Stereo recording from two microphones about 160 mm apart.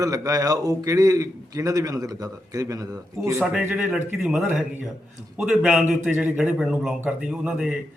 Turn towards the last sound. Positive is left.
turn(degrees=-5)  # may be behind; listen again after turning